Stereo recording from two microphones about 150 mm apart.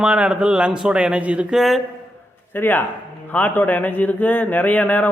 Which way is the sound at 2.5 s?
10° left (ahead or behind).